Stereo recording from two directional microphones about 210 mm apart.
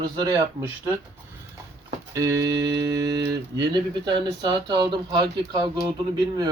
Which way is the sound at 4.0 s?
20° right (ahead or behind).